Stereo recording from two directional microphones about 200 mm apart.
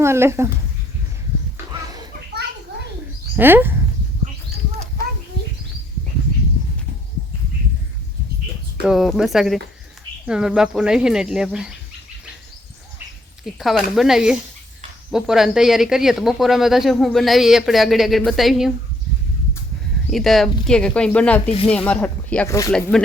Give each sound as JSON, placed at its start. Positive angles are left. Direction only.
{"t": 0.0, "sound": "speech", "side_deg": -15}
{"t": 3.3, "sound": "speech", "side_deg": -10}
{"t": 8.8, "sound": "speech", "side_deg": 0}
{"t": 13.4, "sound": "speech", "side_deg": 0}
{"t": 20.1, "sound": "speech", "side_deg": 0}
{"t": 22.7, "sound": "speech", "side_deg": 5}